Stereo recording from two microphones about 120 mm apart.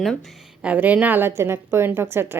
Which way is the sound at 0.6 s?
10° right (ahead or behind).